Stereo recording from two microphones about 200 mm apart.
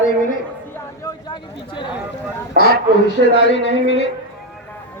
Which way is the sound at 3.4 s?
60° left (ahead or behind).